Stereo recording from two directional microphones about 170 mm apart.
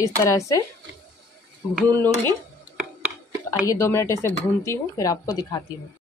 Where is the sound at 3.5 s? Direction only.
20° left (ahead or behind).